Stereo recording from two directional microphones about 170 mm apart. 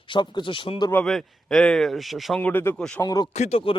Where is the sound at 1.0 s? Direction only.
Centre (ahead or behind).